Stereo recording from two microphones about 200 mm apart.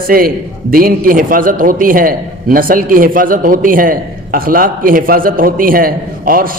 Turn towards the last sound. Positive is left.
turn(degrees=-45)  # may be behind; listen again after turning